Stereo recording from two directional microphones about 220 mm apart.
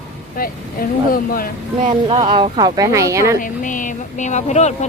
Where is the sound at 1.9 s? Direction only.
25° right (ahead or behind).